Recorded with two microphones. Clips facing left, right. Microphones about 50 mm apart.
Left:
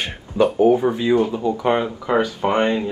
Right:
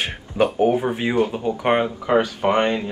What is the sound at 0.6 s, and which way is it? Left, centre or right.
Speech, right.